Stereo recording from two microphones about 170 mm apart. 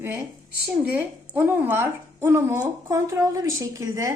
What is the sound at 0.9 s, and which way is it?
A woman's voice, 10° right (ahead or behind).